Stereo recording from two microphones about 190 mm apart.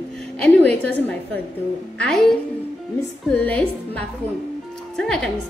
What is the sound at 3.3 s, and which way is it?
A woman's voice, 5° left (ahead or behind).